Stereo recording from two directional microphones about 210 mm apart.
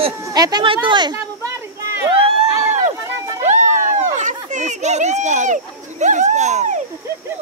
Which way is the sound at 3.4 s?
35° right (ahead or behind).